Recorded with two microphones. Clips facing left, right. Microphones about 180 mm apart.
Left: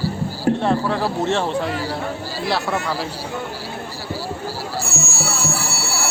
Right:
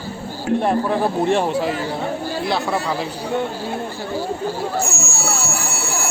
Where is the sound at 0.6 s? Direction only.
15° right (ahead or behind); by 2.7 s centre (ahead or behind).